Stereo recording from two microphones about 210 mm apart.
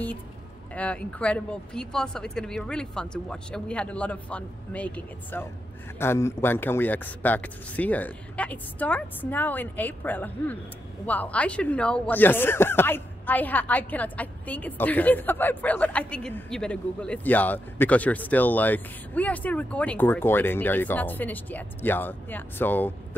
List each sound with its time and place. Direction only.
0.7 s speech: 5° left (ahead or behind)